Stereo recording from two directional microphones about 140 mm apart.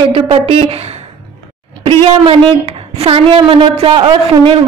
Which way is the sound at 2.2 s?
40° right (ahead or behind).